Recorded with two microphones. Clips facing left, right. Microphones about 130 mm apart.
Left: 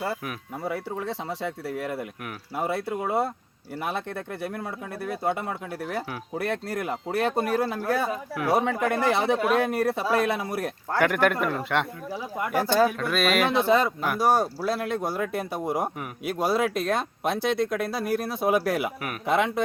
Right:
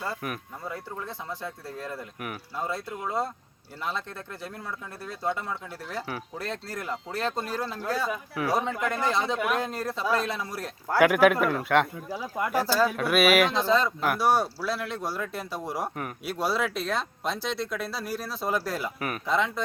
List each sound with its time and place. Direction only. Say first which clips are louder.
0.6 s speech: left 9 dB; 80° left; by 3.2 s 65° left (ahead or behind)
4.4 s speech: left 5 dB; 60° left (ahead or behind)
10.9 s speech: right 3 dB; 5° right (ahead or behind)
13.0 s speech: right 3 dB; 5° right (ahead or behind)
13.5 s speech: left 3 dB; 60° left (ahead or behind)
14.2 s speech: left 3 dB; 45° left (ahead or behind); by 19.6 s 60° left (ahead or behind)